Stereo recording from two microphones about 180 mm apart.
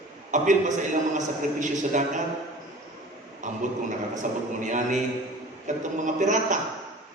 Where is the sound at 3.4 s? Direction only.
45° right (ahead or behind).